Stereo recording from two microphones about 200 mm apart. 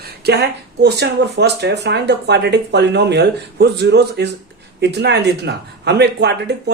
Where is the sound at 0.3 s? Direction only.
55° right (ahead or behind).